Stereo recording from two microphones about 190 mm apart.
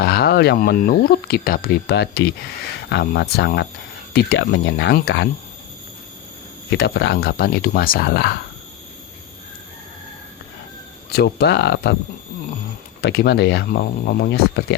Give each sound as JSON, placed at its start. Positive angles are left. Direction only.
{"t": 0.0, "sound": "speech", "side_deg": 55}
{"t": 6.7, "sound": "speech", "side_deg": 60}
{"t": 11.1, "sound": "speech", "side_deg": 60}
{"t": 13.0, "sound": "speech", "side_deg": 60}